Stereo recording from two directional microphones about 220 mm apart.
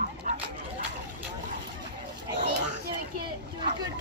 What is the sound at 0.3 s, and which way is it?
Dog, 35° right (ahead or behind).